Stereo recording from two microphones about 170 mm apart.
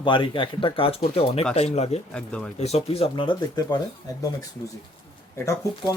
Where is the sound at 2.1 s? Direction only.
5° left (ahead or behind).